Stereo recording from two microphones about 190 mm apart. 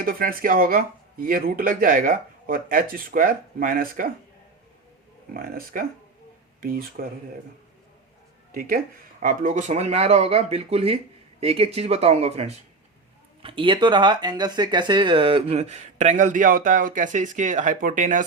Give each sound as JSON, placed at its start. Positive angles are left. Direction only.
{"t": 0.0, "sound": "speech", "side_deg": -50}
{"t": 5.3, "sound": "speech", "side_deg": -50}
{"t": 9.2, "sound": "speech", "side_deg": -40}